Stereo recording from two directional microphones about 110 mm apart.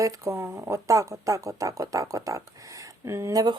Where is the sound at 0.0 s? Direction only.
30° right (ahead or behind).